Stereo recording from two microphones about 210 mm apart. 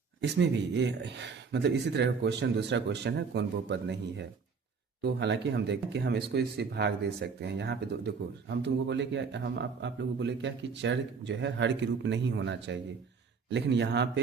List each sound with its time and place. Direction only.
0.2 s speech: 55° right (ahead or behind)